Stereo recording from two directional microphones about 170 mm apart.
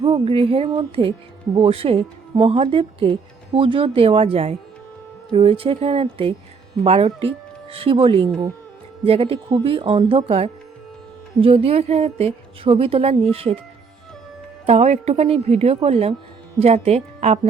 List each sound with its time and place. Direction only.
0.0 s speech: 35° right (ahead or behind)
14.7 s speech: 40° right (ahead or behind)